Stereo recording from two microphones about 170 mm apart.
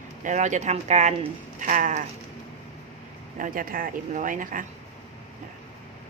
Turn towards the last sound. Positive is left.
turn(degrees=-50)  # may be behind; listen again after turning